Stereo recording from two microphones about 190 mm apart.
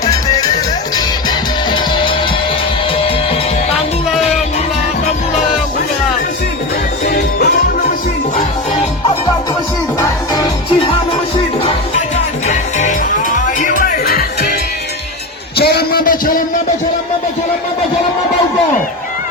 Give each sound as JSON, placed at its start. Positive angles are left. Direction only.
{"t": 0.9, "sound": "music", "side_deg": 20}
{"t": 7.0, "sound": "music", "side_deg": 45}
{"t": 12.5, "sound": "music", "side_deg": 40}
{"t": 15.5, "sound": "a sound", "side_deg": 55}